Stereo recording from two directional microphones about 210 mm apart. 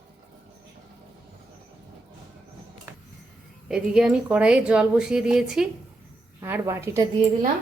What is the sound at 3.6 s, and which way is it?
A woman's voice, 5° right (ahead or behind).